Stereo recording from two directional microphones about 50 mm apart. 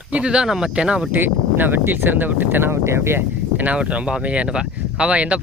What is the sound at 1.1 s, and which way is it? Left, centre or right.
Speech, right.